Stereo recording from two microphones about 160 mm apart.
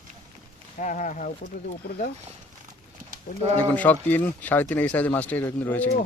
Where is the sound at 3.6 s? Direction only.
10° left (ahead or behind).